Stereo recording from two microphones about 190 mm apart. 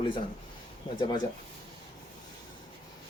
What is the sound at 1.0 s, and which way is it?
Speech, 25° left (ahead or behind).